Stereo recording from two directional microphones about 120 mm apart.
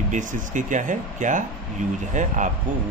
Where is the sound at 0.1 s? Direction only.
90° right.